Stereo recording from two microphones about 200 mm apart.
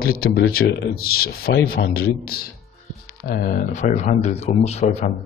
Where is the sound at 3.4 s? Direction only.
40° left (ahead or behind).